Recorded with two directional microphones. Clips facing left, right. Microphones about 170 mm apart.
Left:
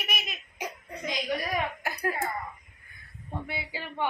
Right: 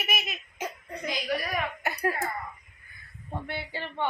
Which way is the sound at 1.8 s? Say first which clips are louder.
Right 2 dB; centre (ahead or behind).